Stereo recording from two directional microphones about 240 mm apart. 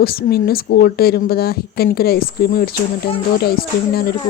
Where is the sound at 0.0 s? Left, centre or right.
Left.